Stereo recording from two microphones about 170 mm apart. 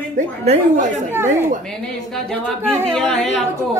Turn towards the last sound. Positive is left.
turn(degrees=5)  # may be behind; listen again after turning